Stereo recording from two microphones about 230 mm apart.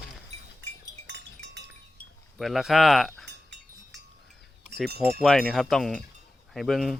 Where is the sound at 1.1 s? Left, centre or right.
Right.